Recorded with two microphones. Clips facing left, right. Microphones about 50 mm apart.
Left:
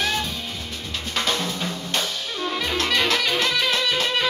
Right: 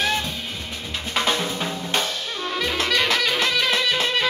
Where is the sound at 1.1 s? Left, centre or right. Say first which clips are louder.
Right 2 dB; centre.